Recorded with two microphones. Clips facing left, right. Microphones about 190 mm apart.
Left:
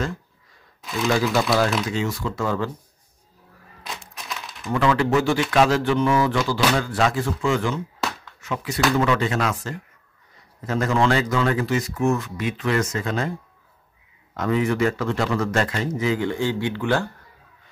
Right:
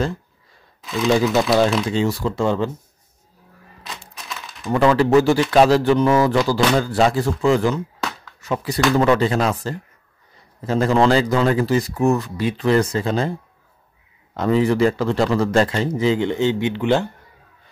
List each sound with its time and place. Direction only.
0.8 s speech: centre (ahead or behind)
1.9 s a man's voice: 30° right (ahead or behind)
4.3 s typing: centre (ahead or behind)
4.6 s speech: 35° right (ahead or behind)
14.3 s a man's voice: 30° right (ahead or behind)